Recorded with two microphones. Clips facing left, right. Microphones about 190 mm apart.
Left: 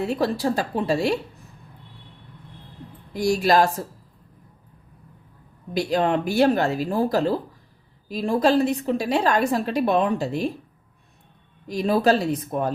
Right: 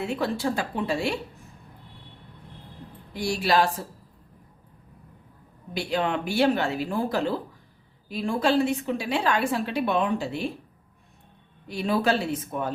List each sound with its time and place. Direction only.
0.0 s a woman's voice: 35° left (ahead or behind)
3.1 s speech: 45° left (ahead or behind)
5.7 s a woman's voice: 40° left (ahead or behind)
11.7 s a woman's voice: 40° left (ahead or behind)